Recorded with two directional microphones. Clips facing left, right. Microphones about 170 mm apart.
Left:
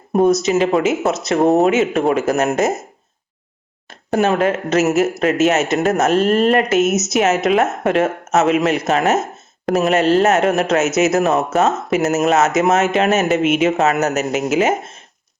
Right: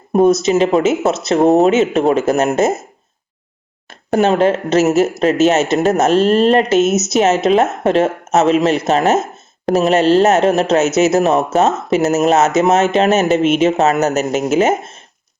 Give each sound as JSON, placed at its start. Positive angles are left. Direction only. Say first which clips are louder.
{"t": 0.1, "sound": "speech", "louder": "right 2 dB", "side_deg": -25}
{"t": 3.8, "sound": "speech", "louder": "right 3 dB", "side_deg": -30}